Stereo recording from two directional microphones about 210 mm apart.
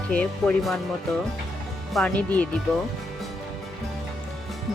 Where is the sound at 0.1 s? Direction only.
5° left (ahead or behind).